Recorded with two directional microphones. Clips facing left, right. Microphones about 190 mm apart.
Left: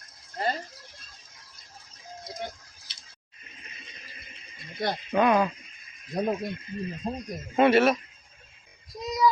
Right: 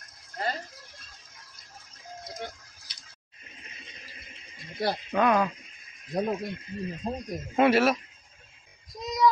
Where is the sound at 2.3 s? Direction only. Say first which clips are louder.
Left 2 dB; 15° left (ahead or behind).